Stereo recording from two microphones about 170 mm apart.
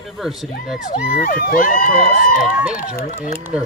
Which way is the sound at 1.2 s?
55° left (ahead or behind).